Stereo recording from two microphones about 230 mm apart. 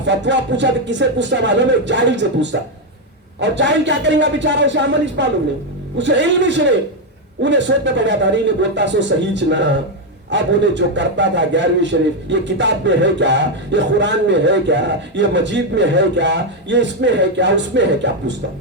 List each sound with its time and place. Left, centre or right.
0.0 s a man's voice: right